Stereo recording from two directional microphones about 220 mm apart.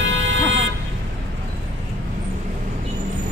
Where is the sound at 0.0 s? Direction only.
60° right (ahead or behind).